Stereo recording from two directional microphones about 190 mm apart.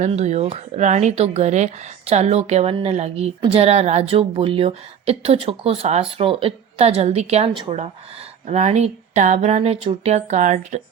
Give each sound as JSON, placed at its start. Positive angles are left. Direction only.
{"t": 0.0, "sound": "speech", "side_deg": -35}